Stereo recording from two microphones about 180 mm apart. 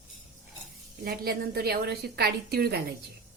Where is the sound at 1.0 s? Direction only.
55° right (ahead or behind).